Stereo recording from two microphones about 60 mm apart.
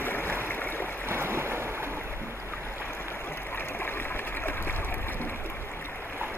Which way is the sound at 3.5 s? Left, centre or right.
Left.